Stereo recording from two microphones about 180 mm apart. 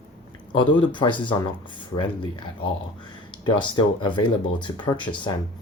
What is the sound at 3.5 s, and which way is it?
Speech, 25° left (ahead or behind).